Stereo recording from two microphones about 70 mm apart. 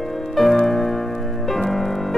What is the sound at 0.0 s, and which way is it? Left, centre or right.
Music, centre.